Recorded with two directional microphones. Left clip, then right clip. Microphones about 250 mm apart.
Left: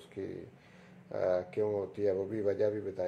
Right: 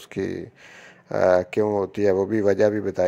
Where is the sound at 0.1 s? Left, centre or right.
Right.